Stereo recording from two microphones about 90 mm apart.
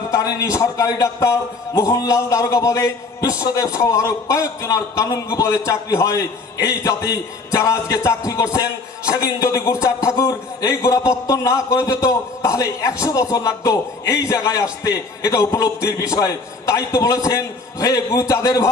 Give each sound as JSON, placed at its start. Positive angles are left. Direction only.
{"t": 0.1, "sound": "a man's voice", "side_deg": 40}
{"t": 10.8, "sound": "a man's voice", "side_deg": 35}